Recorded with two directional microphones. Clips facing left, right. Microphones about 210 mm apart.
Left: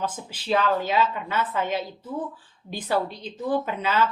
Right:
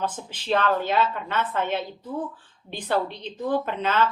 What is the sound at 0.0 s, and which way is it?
Speech, 10° left (ahead or behind).